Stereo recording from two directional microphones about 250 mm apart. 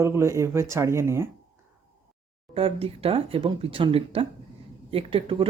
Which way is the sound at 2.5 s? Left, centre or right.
Right.